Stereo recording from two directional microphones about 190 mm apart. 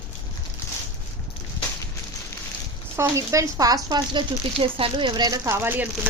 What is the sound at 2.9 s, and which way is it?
Speech, 15° right (ahead or behind).